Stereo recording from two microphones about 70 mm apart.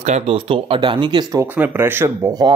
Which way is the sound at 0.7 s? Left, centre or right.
Right.